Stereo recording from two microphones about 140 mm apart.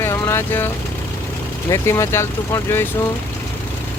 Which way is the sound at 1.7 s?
20° left (ahead or behind).